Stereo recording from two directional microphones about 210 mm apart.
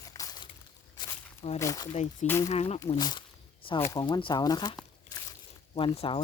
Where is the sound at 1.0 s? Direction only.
20° left (ahead or behind).